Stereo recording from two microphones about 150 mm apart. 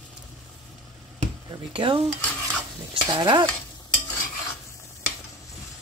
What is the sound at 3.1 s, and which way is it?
Speech, 30° right (ahead or behind).